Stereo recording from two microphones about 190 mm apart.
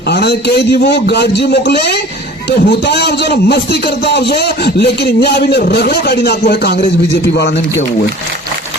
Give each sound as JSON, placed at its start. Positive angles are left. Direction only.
{"t": 0.1, "sound": "a man's voice", "side_deg": 60}